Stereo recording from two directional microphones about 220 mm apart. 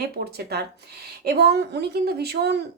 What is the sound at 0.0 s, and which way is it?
A woman's voice, 45° right (ahead or behind).